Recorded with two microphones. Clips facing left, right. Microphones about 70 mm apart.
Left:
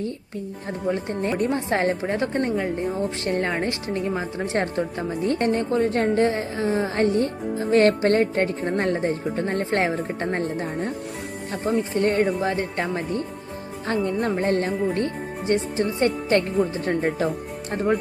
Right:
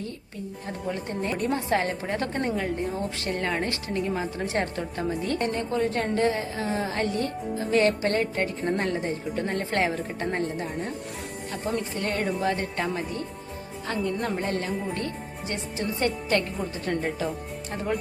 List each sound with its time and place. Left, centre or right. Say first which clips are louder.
0.9 s speech: left 5 dB; left
7.8 s speech: left 5 dB; left